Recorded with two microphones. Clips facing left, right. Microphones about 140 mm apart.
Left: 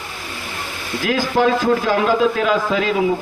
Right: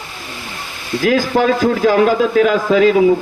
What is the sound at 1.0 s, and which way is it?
Speech, 45° right (ahead or behind).